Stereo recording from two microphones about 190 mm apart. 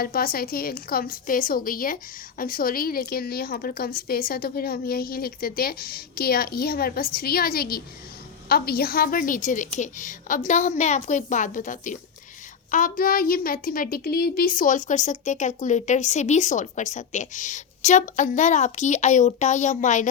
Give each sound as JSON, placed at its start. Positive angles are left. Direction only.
{"t": 0.0, "sound": "a woman's voice", "side_deg": 50}